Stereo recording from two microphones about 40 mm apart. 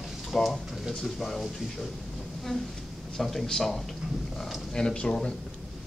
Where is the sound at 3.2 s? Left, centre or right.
Centre.